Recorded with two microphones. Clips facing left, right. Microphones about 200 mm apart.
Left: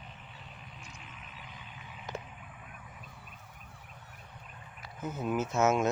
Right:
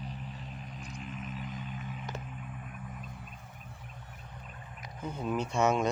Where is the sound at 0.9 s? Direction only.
40° right (ahead or behind).